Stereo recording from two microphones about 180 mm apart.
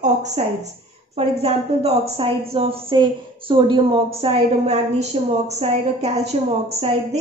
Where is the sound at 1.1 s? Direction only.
35° right (ahead or behind).